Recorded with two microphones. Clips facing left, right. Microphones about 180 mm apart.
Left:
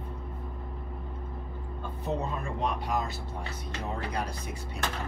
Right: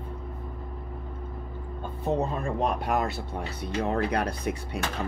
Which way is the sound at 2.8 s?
65° right (ahead or behind).